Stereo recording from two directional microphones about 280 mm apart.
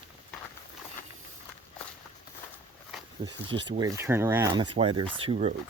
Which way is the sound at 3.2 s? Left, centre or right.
Centre.